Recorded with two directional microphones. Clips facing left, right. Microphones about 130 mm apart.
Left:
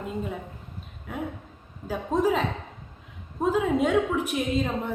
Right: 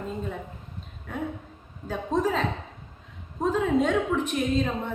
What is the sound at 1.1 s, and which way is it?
A woman's voice, 5° left (ahead or behind).